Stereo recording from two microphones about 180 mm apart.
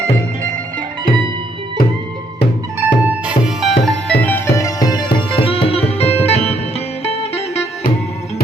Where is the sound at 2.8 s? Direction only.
10° right (ahead or behind).